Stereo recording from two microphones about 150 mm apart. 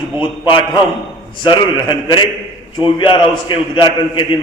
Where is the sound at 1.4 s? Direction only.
30° left (ahead or behind).